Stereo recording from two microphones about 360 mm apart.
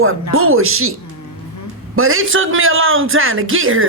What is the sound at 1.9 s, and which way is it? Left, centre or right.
Speech, right.